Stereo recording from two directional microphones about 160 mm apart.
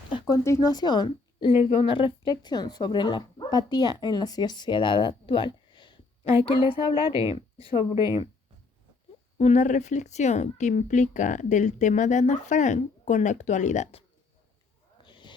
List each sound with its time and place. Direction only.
0.1 s a sound: 30° left (ahead or behind)
0.4 s a woman's voice: 20° left (ahead or behind)
6.9 s a woman's voice: 20° right (ahead or behind)
7.3 s speech: 35° left (ahead or behind)
9.4 s speech: 45° left (ahead or behind)
15.0 s a sound: 30° left (ahead or behind)